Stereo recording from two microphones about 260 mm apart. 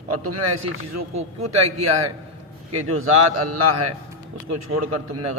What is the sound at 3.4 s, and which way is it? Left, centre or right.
Speech, right.